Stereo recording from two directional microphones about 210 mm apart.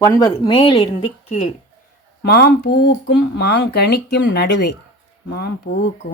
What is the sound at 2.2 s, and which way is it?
Speech, 50° left (ahead or behind).